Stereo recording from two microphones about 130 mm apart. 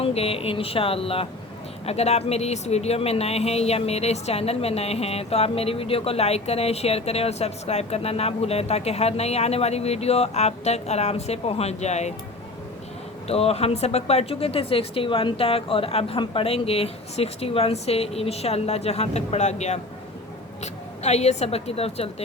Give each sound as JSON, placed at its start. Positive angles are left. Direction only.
{"t": 0.0, "sound": "speech", "side_deg": 50}
{"t": 13.2, "sound": "speech", "side_deg": 50}